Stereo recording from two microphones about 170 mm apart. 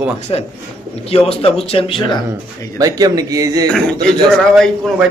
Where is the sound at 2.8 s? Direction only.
20° right (ahead or behind).